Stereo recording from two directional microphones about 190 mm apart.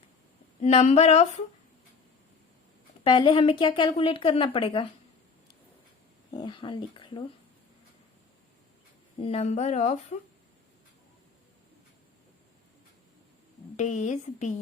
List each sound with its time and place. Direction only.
0.6 s speech: 35° left (ahead or behind)
3.0 s speech: 25° left (ahead or behind)
6.3 s speech: 20° left (ahead or behind)
9.2 s speech: 35° left (ahead or behind)
13.7 s speech: 40° left (ahead or behind)